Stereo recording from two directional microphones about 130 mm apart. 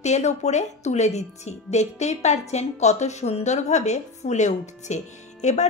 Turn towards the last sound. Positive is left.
turn(degrees=65)  # may be behind; listen again after turning